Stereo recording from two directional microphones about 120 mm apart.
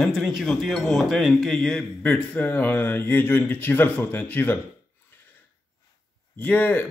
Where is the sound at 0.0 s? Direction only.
Centre (ahead or behind); by 4.6 s 15° left (ahead or behind).